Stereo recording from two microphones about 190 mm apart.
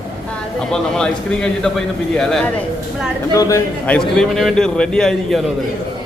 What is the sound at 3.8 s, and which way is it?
A man's voice, 5° left (ahead or behind).